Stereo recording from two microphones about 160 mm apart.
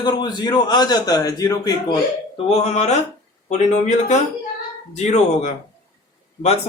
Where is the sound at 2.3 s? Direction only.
40° left (ahead or behind).